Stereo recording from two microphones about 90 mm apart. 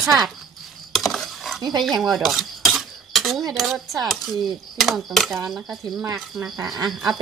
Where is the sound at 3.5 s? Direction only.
Centre (ahead or behind).